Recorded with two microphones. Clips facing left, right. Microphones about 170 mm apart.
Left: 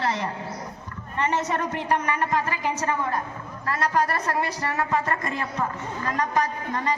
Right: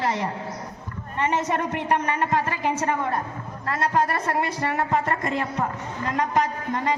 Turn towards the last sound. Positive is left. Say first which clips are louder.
# right 2 dB
turn(degrees=-25)  # may be behind; listen again after turning